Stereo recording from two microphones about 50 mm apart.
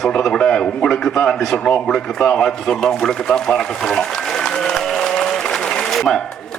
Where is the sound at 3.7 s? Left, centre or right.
Centre.